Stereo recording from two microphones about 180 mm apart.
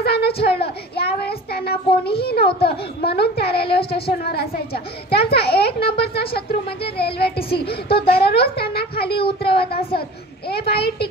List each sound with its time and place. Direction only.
0.0 s a sound: 60° left (ahead or behind)
0.4 s child singing: 65° left (ahead or behind)
2.0 s a woman's voice: 60° left (ahead or behind)